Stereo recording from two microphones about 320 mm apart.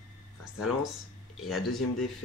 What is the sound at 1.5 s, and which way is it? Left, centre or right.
Speech, centre.